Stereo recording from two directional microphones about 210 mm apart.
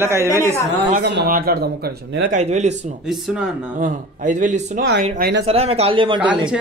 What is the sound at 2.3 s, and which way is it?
Speech, 35° right (ahead or behind).